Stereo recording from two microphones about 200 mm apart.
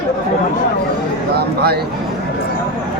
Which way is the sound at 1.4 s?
50° right (ahead or behind).